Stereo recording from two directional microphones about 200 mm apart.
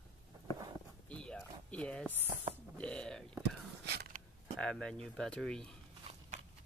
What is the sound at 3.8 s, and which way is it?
Creak, 55° right (ahead or behind).